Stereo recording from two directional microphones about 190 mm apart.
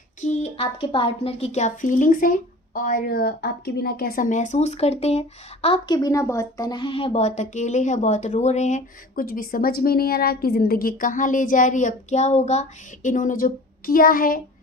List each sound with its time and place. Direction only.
0.2 s speech: 35° left (ahead or behind)
6.0 s speech: 15° left (ahead or behind); by 14.4 s 50° left (ahead or behind)